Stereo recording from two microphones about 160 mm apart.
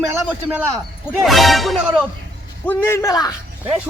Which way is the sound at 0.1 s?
10° right (ahead or behind).